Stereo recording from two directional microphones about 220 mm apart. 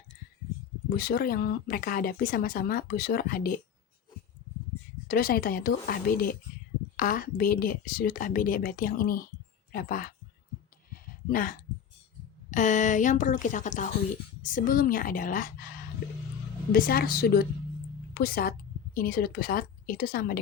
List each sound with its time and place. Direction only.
0.9 s a woman's voice: 45° left (ahead or behind)
5.0 s a woman's voice: 45° left (ahead or behind)
10.9 s a sound: 40° left (ahead or behind)
12.5 s a woman's voice: 35° left (ahead or behind)
16.7 s a woman's voice: 40° left (ahead or behind)